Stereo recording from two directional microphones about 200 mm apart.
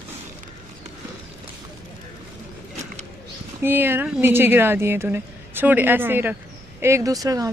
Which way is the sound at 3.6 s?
10° right (ahead or behind).